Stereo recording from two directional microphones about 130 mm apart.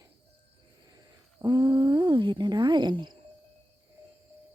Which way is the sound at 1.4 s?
30° right (ahead or behind).